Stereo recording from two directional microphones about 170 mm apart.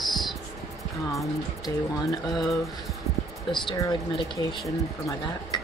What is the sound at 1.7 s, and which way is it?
Speech, 20° left (ahead or behind).